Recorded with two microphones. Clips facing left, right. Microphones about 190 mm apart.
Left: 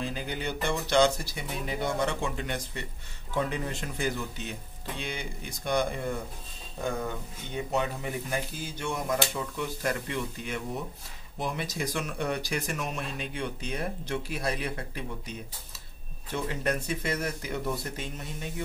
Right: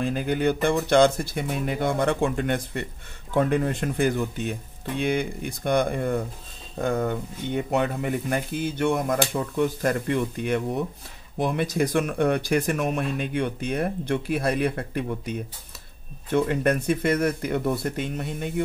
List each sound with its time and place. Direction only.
0.0 s speech: 55° right (ahead or behind)